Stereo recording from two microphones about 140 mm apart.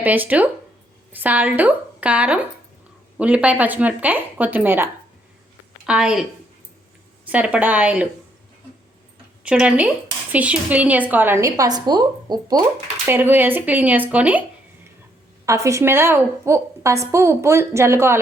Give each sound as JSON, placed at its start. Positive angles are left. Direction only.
{"t": 0.0, "sound": "a woman's voice", "side_deg": -10}
{"t": 7.3, "sound": "speech", "side_deg": -10}
{"t": 9.4, "sound": "speech", "side_deg": -10}
{"t": 13.1, "sound": "speech", "side_deg": -15}
{"t": 15.4, "sound": "speech", "side_deg": -20}